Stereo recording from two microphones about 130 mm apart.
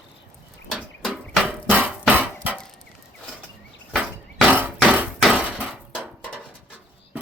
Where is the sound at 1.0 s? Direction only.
Centre (ahead or behind).